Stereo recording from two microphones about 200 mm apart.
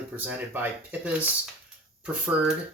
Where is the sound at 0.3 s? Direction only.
10° right (ahead or behind).